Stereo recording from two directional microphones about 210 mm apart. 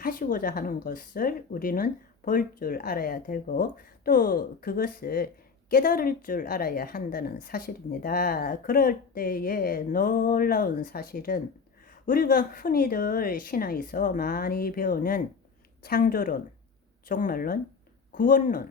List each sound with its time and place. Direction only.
0.0 s a woman's voice: 40° left (ahead or behind)